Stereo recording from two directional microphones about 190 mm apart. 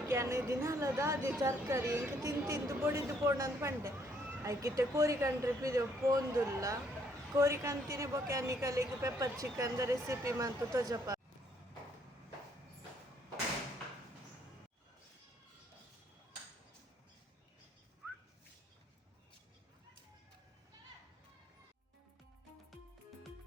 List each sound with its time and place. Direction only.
0.1 s a woman's voice: 15° right (ahead or behind)